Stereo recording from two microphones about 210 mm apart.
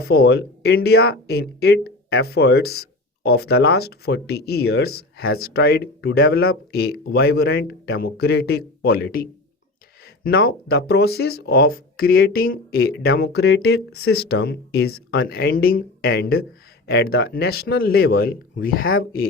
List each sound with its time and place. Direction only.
0.0 s speech: 50° left (ahead or behind)
10.7 s speech: 50° left (ahead or behind)